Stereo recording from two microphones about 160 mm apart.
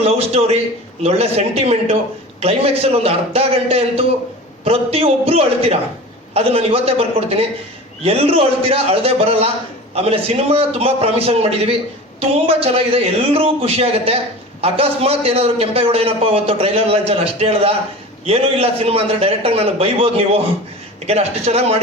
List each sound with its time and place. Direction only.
0.0 s a man's voice: 40° right (ahead or behind)